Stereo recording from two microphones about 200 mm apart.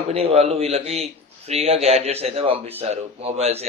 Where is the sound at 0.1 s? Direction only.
30° right (ahead or behind).